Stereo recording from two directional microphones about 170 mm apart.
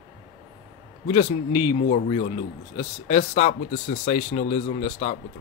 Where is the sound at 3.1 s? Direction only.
50° left (ahead or behind).